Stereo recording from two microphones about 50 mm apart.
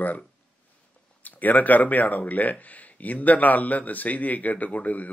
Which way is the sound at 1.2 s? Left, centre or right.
Left.